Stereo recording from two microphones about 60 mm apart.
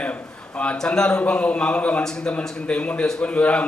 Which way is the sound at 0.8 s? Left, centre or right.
Centre.